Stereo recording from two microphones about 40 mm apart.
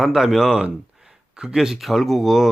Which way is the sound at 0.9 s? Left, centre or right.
Centre.